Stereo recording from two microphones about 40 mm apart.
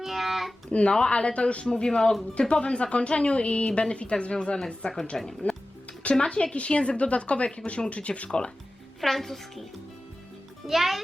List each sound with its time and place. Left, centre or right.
0.0 s a sound: centre
0.7 s a woman's voice: left
5.4 s music: left
6.1 s a woman's voice: left
9.0 s a child's voice: centre
10.7 s a child's voice: centre